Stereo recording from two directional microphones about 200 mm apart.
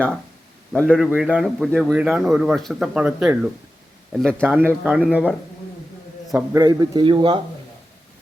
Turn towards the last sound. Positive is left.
turn(degrees=-20)  # may be behind; listen again after turning